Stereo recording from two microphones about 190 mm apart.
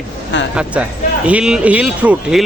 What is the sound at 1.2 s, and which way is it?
Speech, 5° right (ahead or behind).